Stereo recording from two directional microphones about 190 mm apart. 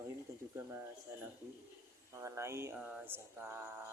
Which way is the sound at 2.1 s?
15° right (ahead or behind).